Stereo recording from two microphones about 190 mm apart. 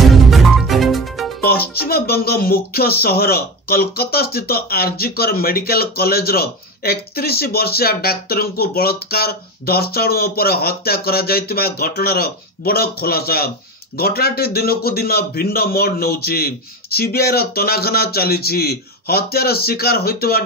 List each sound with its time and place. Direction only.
0.1 s music: centre (ahead or behind)
1.4 s speech: 55° left (ahead or behind)